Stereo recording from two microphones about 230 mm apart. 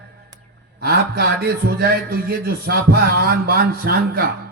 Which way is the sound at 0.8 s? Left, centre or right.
Right.